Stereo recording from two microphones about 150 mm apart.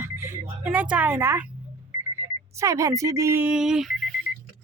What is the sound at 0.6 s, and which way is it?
Speech, 10° right (ahead or behind).